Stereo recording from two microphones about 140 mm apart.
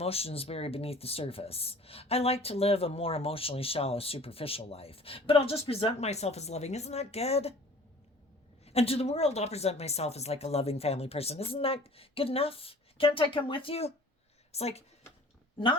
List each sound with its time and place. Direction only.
0.0 s speech: 45° left (ahead or behind)
8.6 s speech: 45° left (ahead or behind)